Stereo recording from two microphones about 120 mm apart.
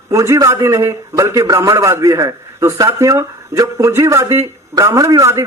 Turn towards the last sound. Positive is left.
turn(degrees=-25)  # may be behind; listen again after turning